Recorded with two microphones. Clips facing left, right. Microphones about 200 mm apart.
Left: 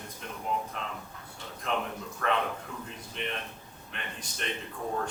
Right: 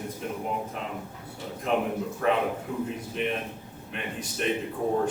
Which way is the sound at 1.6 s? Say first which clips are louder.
Right 7 dB; 10° right (ahead or behind).